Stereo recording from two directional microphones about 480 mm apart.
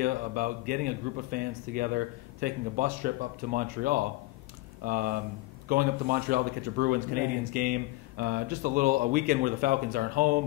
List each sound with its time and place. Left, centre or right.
0.0 s speech: centre